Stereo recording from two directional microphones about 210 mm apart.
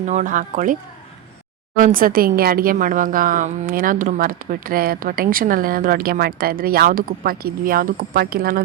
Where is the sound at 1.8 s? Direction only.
40° right (ahead or behind).